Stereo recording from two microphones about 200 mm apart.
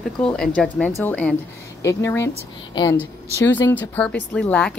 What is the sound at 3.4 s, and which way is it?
Speech, 15° left (ahead or behind).